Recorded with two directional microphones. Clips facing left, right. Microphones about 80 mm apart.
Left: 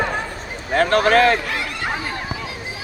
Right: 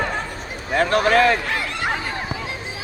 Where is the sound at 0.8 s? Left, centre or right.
Left.